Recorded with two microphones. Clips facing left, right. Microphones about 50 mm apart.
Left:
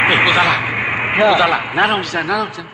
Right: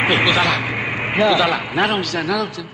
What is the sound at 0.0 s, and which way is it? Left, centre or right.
A man's voice, centre.